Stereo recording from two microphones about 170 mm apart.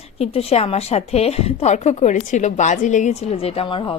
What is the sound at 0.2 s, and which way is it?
A woman's voice, 35° left (ahead or behind).